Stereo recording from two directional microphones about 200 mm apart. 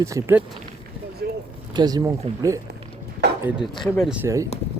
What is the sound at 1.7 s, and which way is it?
Speech, 20° right (ahead or behind).